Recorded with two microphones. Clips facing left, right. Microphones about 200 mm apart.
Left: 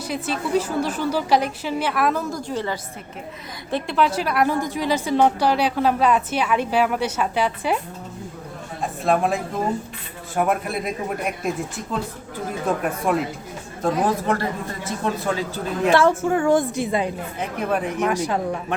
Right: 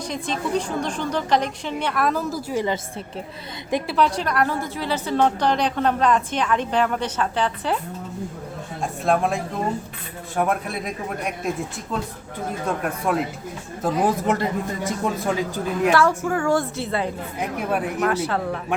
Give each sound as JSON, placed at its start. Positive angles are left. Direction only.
{"t": 0.1, "sound": "a woman's voice", "side_deg": 5}
{"t": 3.9, "sound": "a woman's voice", "side_deg": 5}
{"t": 8.8, "sound": "a woman's voice", "side_deg": 0}
{"t": 13.8, "sound": "speech", "side_deg": -10}
{"t": 15.9, "sound": "a woman's voice", "side_deg": 25}
{"t": 17.4, "sound": "speech", "side_deg": -5}
{"t": 18.0, "sound": "a woman's voice", "side_deg": 15}